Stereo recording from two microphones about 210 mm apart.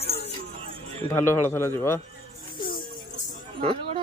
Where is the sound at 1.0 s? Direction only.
10° left (ahead or behind).